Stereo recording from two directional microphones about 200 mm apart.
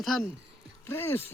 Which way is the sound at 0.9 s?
10° left (ahead or behind).